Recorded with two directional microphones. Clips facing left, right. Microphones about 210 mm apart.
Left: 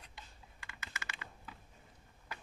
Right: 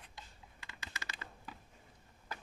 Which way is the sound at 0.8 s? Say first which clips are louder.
Even; 35° right (ahead or behind).